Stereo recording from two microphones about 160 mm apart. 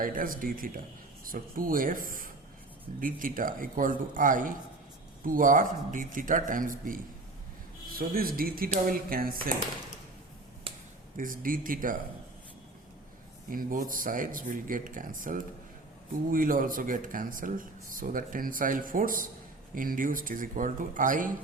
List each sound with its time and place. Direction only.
0.0 s speech: 60° right (ahead or behind)
11.2 s speech: 60° right (ahead or behind)
13.5 s speech: 60° right (ahead or behind)